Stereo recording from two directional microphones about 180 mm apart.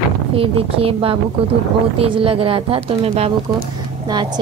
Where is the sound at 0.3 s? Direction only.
30° right (ahead or behind).